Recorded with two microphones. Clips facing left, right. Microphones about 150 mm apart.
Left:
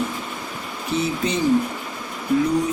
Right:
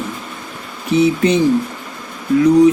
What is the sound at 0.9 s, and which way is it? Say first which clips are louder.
Speech: right 10 dB; 70° right (ahead or behind).